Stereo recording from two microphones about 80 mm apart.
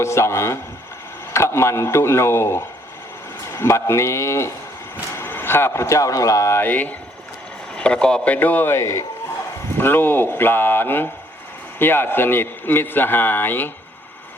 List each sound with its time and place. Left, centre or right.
0.0 s speech: left
6.6 s a man's voice: left
8.7 s a man's voice: left